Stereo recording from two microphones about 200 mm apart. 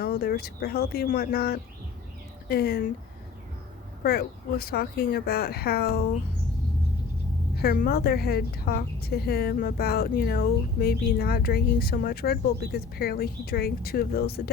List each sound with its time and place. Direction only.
0.0 s a woman's voice: 50° left (ahead or behind)
4.0 s a woman's voice: 50° left (ahead or behind)
7.6 s a woman's voice: 50° left (ahead or behind)